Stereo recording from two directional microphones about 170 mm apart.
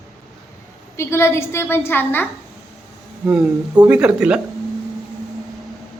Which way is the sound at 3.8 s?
5° right (ahead or behind).